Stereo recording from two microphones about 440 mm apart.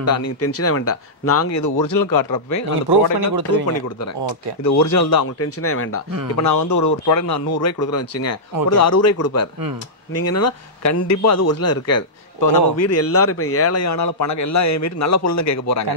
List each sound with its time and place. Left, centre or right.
0.0 s a man's voice: left
2.9 s speech: right
3.6 s a man's voice: left
6.4 s a man's voice: left